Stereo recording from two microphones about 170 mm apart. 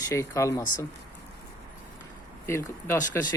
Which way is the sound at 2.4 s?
15° left (ahead or behind).